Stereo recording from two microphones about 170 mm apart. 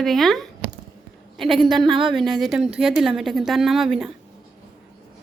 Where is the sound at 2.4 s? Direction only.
5° right (ahead or behind).